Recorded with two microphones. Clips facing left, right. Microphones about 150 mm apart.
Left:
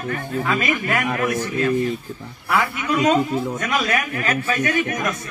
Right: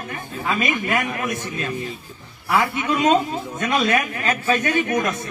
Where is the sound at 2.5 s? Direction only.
20° right (ahead or behind).